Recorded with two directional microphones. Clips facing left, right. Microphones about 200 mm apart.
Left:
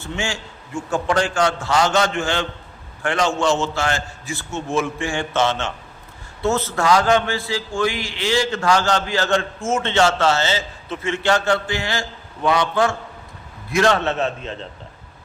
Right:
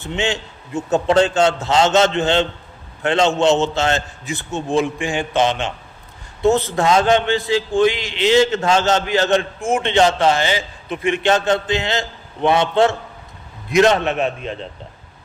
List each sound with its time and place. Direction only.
0.0 s a man's voice: 20° right (ahead or behind)